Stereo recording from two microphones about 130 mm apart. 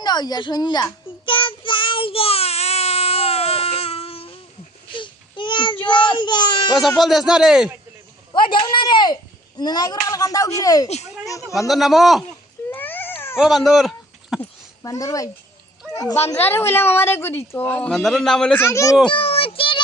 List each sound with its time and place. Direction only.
0.0 s child singing: 35° left (ahead or behind)
4.9 s baby cry: 40° left (ahead or behind)
7.0 s a man's voice: centre (ahead or behind)
8.3 s speech: 40° left (ahead or behind)
10.1 s a sound: 30° left (ahead or behind)
10.6 s speech: 30° left (ahead or behind)
10.8 s speech: 55° left (ahead or behind)
11.7 s a man's voice: centre (ahead or behind)
12.7 s baby cry: 15° left (ahead or behind)
13.4 s speech: centre (ahead or behind)
14.8 s a child's voice: 25° left (ahead or behind)
17.9 s a man's voice: centre (ahead or behind)
18.6 s speech: 20° left (ahead or behind)
19.0 s child singing: 45° left (ahead or behind)